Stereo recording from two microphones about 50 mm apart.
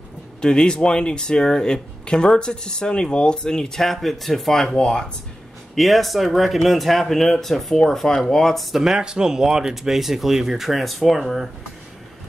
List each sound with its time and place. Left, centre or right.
0.4 s speech: centre
5.8 s speech: centre
8.7 s speech: centre